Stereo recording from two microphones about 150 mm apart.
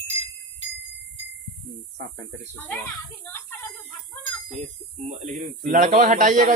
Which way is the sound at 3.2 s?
15° left (ahead or behind).